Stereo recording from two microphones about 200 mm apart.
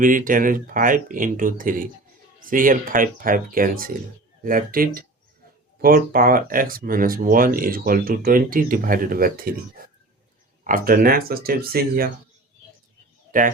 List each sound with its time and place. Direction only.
0.0 s speech: 40° right (ahead or behind)
13.3 s speech: 40° right (ahead or behind)